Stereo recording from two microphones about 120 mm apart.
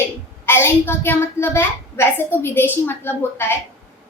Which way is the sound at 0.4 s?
20° left (ahead or behind).